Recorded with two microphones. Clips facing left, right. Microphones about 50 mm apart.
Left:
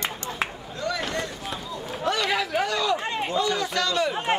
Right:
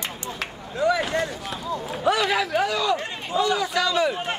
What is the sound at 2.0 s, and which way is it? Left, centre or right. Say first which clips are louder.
A man's voice: right 3 dB; centre.